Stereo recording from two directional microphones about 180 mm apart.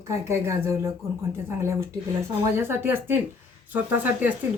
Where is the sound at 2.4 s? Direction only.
15° right (ahead or behind).